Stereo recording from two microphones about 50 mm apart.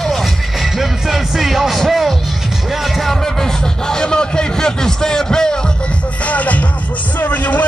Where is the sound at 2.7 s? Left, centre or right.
Centre.